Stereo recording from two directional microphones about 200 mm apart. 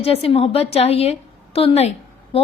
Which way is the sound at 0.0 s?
30° left (ahead or behind).